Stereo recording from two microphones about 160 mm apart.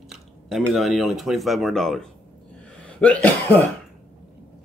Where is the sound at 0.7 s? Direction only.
Centre (ahead or behind).